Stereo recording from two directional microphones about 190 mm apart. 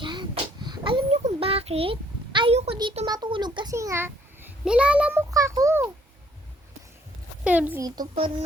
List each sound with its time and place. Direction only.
0.0 s a sound: 25° right (ahead or behind)
3.1 s a child's voice: 25° right (ahead or behind); by 5.2 s 5° right (ahead or behind)
5.3 s a child's voice: 15° right (ahead or behind)
7.4 s a woman's voice: 10° right (ahead or behind)
8.1 s speech: 30° right (ahead or behind)